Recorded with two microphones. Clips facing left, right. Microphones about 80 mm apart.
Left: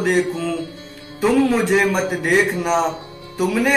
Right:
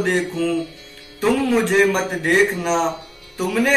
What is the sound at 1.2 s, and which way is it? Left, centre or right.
Speech, centre.